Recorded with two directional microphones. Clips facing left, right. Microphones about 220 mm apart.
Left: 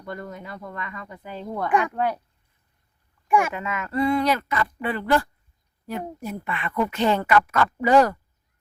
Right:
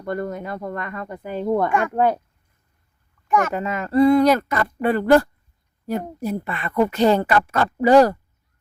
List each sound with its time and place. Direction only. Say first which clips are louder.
0.0 s speech: right 8 dB; 50° right (ahead or behind)
3.2 s speech: right 1 dB; 10° left (ahead or behind)
3.5 s speech: right 7 dB; 35° right (ahead or behind)